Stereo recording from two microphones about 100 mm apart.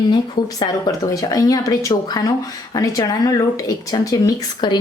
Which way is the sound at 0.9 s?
35° left (ahead or behind).